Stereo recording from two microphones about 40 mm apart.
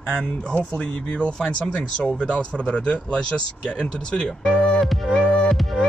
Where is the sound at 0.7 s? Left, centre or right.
Left.